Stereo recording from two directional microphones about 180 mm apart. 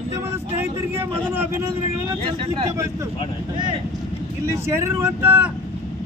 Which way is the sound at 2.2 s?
30° right (ahead or behind).